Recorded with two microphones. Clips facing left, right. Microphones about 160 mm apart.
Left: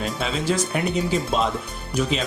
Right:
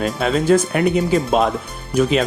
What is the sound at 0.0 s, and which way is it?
Speech, 50° right (ahead or behind).